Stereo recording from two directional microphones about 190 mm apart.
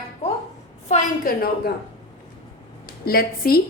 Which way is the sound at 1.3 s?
50° left (ahead or behind).